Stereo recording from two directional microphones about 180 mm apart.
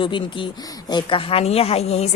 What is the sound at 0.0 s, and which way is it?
Speech, 30° left (ahead or behind).